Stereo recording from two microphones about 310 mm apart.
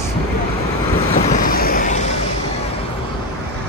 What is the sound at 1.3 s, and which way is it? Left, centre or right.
Vehicle, left.